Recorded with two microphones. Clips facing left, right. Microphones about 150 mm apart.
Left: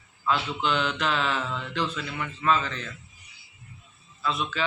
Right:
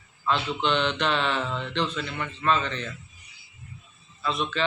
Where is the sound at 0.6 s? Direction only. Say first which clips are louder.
Right 2 dB; 5° left (ahead or behind).